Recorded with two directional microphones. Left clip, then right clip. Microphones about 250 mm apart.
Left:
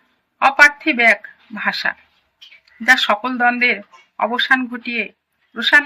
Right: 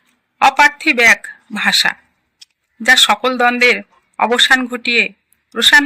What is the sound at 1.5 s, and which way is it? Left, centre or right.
A man's voice, right.